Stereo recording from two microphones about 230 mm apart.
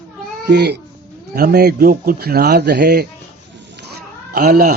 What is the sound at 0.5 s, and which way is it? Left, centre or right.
Speech, right.